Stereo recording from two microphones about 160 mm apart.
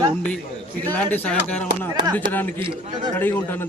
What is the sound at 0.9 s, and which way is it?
Speech, 10° left (ahead or behind).